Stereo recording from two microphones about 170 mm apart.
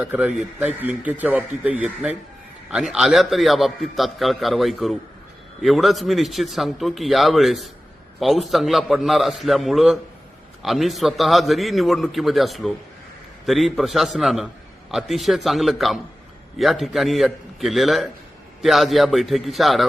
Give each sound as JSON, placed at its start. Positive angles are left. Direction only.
{"t": 0.0, "sound": "a man's voice", "side_deg": -10}